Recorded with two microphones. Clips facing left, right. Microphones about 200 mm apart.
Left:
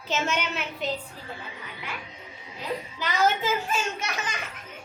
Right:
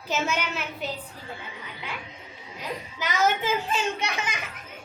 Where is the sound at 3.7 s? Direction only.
15° right (ahead or behind).